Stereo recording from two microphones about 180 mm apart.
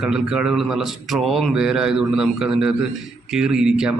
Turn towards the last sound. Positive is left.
turn(degrees=-5)  # may be behind; listen again after turning